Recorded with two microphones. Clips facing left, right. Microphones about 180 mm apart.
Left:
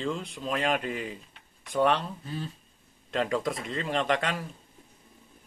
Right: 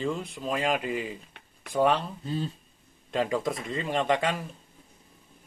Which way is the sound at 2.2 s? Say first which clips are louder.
Right 5 dB; 25° right (ahead or behind).